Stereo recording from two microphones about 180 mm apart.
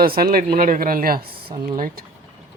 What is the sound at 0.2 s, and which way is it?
Speech, 55° right (ahead or behind).